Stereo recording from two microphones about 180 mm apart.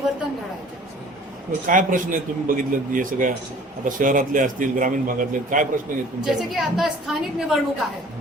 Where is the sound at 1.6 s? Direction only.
50° right (ahead or behind).